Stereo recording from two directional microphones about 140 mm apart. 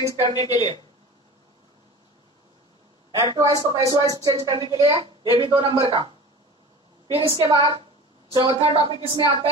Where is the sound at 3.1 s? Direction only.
25° right (ahead or behind).